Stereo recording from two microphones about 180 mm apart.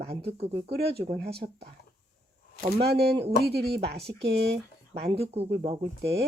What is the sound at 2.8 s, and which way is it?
Speech, 65° right (ahead or behind).